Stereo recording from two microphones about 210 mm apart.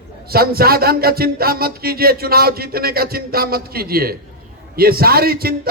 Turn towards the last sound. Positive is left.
turn(degrees=-45)  # may be behind; listen again after turning